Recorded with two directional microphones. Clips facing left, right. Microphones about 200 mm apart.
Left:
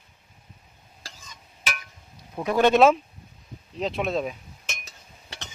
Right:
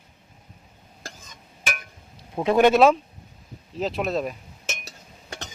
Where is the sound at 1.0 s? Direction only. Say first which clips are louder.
Right 5 dB; 50° right (ahead or behind).